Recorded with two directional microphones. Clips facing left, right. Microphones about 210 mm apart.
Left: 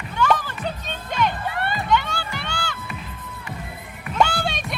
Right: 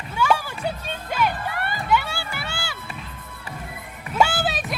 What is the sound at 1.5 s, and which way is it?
Music, 25° left (ahead or behind).